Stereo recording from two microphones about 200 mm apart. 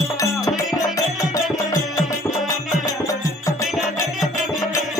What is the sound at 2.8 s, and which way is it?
Music, 15° left (ahead or behind).